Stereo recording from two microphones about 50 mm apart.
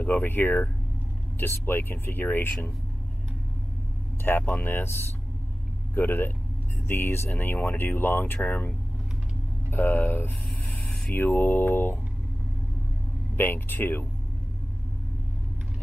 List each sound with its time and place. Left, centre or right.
0.0 s mantra: left
1.4 s speech: left
4.2 s speech: left
5.9 s speech: left
8.5 s mantra: left
9.7 s speech: left
10.7 s vehicle: centre
11.1 s mantra: left
13.4 s speech: left